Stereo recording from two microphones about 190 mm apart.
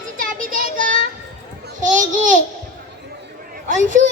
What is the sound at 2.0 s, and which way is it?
Babbling, 40° right (ahead or behind).